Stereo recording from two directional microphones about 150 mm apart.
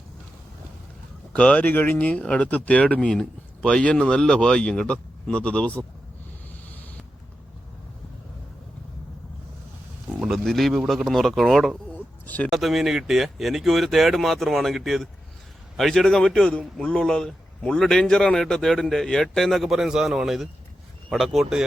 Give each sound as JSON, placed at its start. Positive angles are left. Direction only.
{"t": 1.3, "sound": "speech", "side_deg": 10}
{"t": 10.1, "sound": "speech", "side_deg": -5}
{"t": 12.5, "sound": "a man's voice", "side_deg": 0}